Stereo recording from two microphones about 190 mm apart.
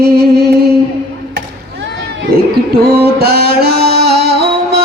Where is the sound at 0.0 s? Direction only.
55° right (ahead or behind).